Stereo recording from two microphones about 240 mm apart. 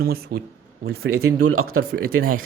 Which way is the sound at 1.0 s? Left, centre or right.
Right.